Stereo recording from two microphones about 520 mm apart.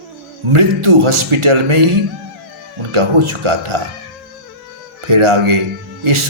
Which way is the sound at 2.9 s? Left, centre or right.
Right.